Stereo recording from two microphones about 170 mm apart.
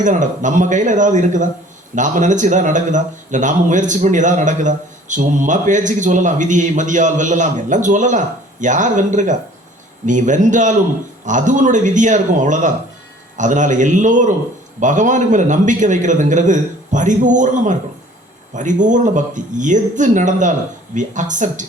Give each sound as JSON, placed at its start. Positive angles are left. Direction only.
{"t": 0.0, "sound": "speech", "side_deg": -45}